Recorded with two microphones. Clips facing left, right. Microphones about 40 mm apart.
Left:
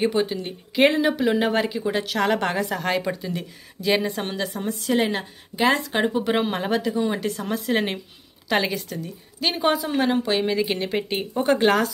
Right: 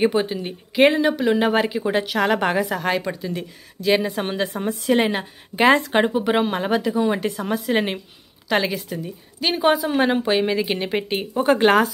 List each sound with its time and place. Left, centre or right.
0.0 s speech: centre
1.8 s a woman's voice: centre
2.0 s a woman's voice: centre
4.6 s a woman's voice: right
6.0 s a woman's voice: centre
9.9 s speech: centre